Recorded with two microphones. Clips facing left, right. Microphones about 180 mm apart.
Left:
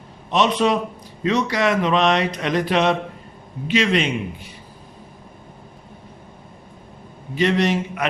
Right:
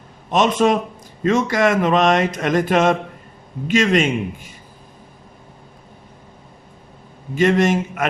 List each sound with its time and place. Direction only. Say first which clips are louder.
0.3 s speech: right 2 dB; 50° right (ahead or behind)
7.3 s speech: right 3 dB; 50° right (ahead or behind)